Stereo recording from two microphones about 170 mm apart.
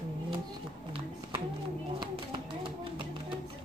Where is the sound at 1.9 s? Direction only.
30° right (ahead or behind).